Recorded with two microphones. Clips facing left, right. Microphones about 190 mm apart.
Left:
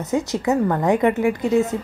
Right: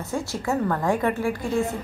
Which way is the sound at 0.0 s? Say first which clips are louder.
Left 7 dB; 20° left (ahead or behind).